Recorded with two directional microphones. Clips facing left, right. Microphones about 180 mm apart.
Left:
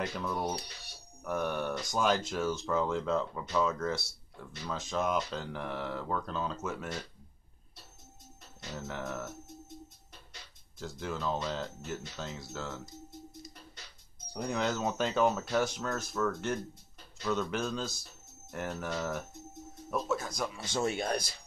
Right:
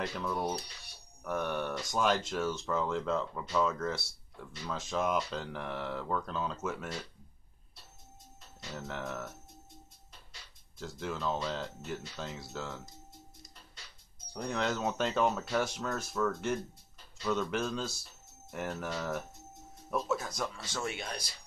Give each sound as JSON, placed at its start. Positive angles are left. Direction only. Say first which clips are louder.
{"t": 0.0, "sound": "speech", "louder": "even", "side_deg": 0}
{"t": 8.7, "sound": "speech", "louder": "left 1 dB", "side_deg": 0}
{"t": 10.8, "sound": "speech", "louder": "even", "side_deg": 0}
{"t": 14.3, "sound": "speech", "louder": "left 1 dB", "side_deg": 5}
{"t": 20.8, "sound": "speech", "louder": "left 8 dB", "side_deg": 40}